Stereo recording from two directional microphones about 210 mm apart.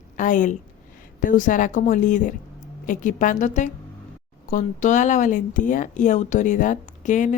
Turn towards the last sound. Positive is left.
turn(degrees=35)  # may be behind; listen again after turning